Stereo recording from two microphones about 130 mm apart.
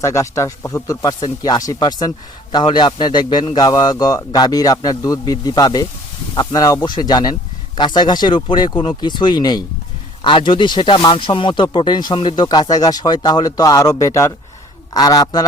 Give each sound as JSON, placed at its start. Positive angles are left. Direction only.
{"t": 0.0, "sound": "speech", "side_deg": 25}